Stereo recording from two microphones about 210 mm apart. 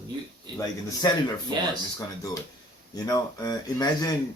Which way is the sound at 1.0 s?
15° left (ahead or behind).